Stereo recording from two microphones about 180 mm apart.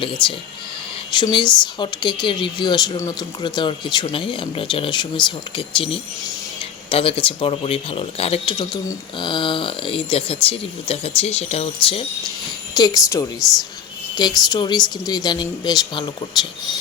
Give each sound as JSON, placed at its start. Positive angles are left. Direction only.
{"t": 0.0, "sound": "speech", "side_deg": 25}
{"t": 12.7, "sound": "speech", "side_deg": 20}